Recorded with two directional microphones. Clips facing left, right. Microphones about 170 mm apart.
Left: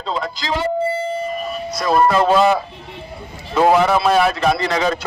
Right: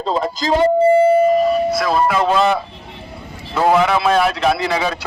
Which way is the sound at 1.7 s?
5° right (ahead or behind).